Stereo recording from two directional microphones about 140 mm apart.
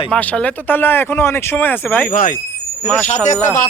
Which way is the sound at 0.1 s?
10° left (ahead or behind).